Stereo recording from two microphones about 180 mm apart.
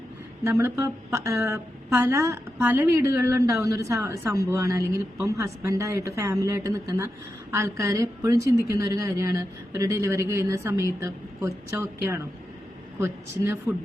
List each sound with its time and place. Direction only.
0.4 s a woman's voice: 15° right (ahead or behind)
13.0 s a woman's voice: 15° right (ahead or behind)